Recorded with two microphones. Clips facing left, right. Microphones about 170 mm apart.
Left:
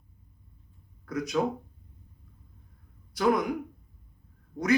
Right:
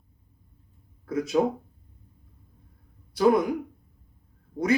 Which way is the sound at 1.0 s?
25° right (ahead or behind).